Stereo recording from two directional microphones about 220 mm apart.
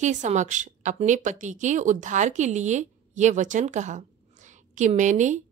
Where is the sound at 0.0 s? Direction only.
35° right (ahead or behind).